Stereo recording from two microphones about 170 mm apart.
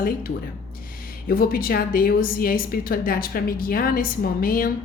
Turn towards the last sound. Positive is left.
turn(degrees=55)  # may be behind; listen again after turning